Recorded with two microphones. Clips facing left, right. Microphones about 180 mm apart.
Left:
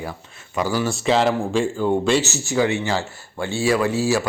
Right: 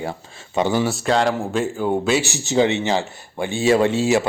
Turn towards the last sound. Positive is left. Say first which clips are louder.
# right 3 dB
turn(degrees=-20)  # may be behind; listen again after turning